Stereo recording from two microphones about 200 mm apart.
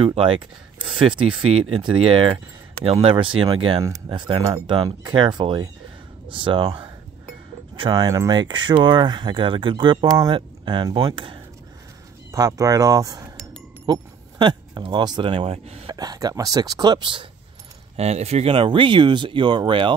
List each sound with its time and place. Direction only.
0.0 s speech: 25° right (ahead or behind)
15.9 s speech: 20° right (ahead or behind)